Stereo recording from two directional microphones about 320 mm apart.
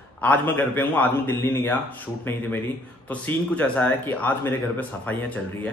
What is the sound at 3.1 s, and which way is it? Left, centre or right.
Speech, centre.